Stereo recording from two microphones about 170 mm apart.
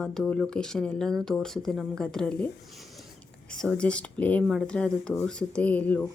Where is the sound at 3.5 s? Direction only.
5° left (ahead or behind).